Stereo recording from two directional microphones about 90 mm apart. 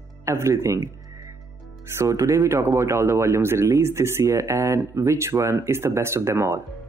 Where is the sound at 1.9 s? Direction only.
35° right (ahead or behind).